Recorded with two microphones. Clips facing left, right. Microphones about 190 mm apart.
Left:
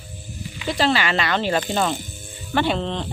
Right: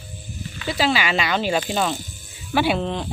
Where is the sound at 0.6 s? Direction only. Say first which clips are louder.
Left 1 dB; 5° right (ahead or behind).